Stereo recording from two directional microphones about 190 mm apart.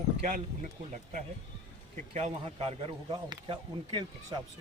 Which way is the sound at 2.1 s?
35° right (ahead or behind).